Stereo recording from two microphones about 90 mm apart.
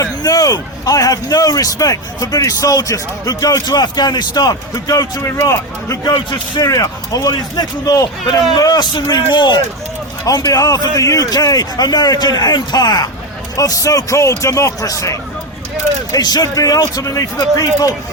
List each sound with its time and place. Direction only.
0.0 s a man's voice: 40° left (ahead or behind)
10.2 s a man's voice: 45° left (ahead or behind)